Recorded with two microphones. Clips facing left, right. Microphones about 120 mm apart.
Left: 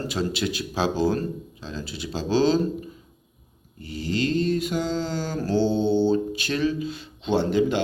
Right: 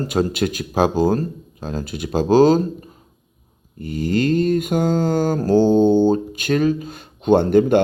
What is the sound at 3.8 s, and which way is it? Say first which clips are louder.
Mantra: right 7 dB; 50° right (ahead or behind).